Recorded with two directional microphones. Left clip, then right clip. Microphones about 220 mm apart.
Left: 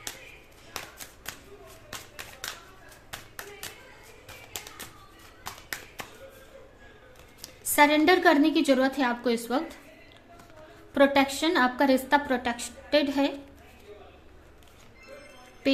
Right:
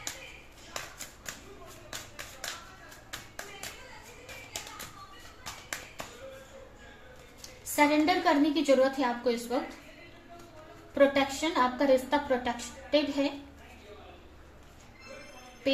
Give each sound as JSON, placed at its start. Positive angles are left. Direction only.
{"t": 7.8, "sound": "a woman's voice", "side_deg": 50}
{"t": 10.9, "sound": "a woman's voice", "side_deg": 50}